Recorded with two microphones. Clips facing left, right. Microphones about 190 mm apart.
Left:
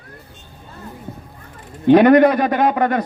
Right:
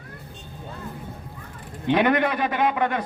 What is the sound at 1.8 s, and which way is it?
A man's voice, 40° left (ahead or behind).